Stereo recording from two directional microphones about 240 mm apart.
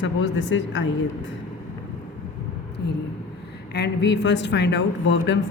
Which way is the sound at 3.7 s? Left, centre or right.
Left.